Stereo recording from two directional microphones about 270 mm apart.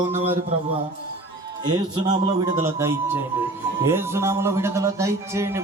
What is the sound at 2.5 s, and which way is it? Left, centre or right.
A man's voice, centre.